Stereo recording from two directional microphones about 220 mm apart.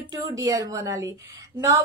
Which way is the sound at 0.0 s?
15° right (ahead or behind).